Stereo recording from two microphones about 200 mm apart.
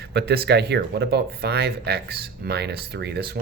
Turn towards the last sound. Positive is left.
turn(degrees=-55)  # may be behind; listen again after turning